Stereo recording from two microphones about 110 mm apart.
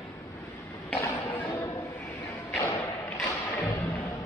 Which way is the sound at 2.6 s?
25° left (ahead or behind).